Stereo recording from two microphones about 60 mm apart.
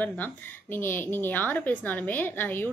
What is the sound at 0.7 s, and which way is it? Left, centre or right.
A woman's voice, left.